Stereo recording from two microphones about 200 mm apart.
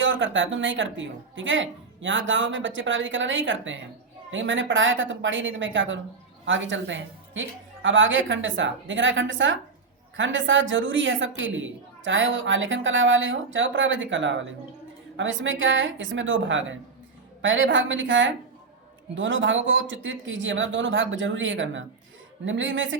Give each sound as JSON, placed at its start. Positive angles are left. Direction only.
{"t": 0.0, "sound": "a woman's voice", "side_deg": -70}